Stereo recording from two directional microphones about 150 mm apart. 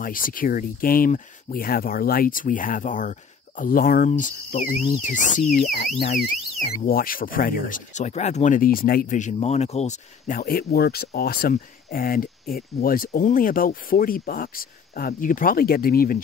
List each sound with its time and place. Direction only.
0.0 s speech: 65° left (ahead or behind)